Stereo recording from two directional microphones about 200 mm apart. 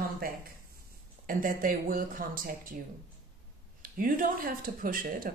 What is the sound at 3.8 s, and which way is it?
Speech, 45° right (ahead or behind).